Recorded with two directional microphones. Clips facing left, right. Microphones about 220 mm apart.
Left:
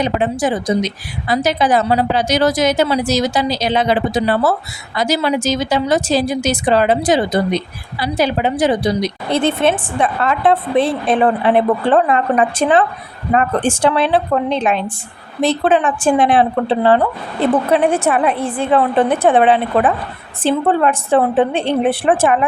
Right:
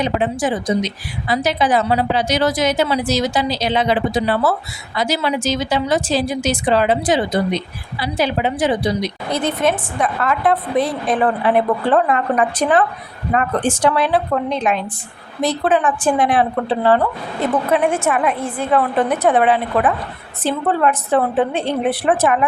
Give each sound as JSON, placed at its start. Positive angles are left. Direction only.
{"t": 0.0, "sound": "a woman's voice", "side_deg": 40}
{"t": 9.3, "sound": "a woman's voice", "side_deg": 30}